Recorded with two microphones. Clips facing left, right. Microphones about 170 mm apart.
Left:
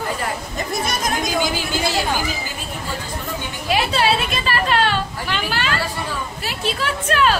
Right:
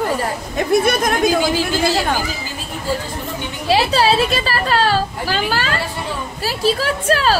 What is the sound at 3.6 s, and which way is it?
Speech, 35° right (ahead or behind).